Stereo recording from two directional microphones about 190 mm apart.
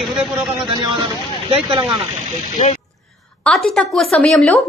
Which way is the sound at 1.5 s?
25° right (ahead or behind).